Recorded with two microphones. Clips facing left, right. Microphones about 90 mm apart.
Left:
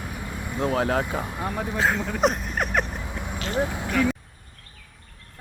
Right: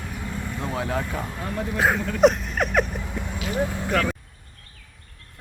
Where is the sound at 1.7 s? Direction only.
15° right (ahead or behind).